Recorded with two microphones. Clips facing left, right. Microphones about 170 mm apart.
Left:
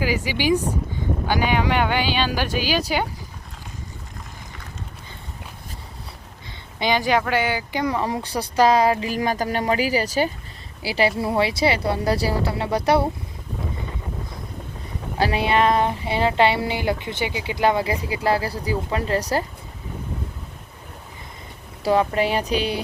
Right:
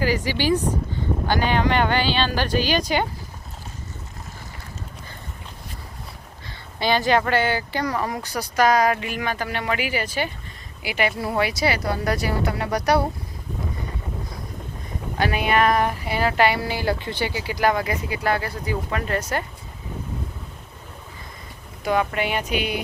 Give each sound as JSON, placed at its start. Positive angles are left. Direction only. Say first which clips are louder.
{"t": 0.0, "sound": "speech", "louder": "even", "side_deg": 10}
{"t": 6.7, "sound": "speech", "louder": "even", "side_deg": 15}
{"t": 15.2, "sound": "speech", "louder": "left 1 dB", "side_deg": 30}
{"t": 21.8, "sound": "speech", "louder": "left 3 dB", "side_deg": 35}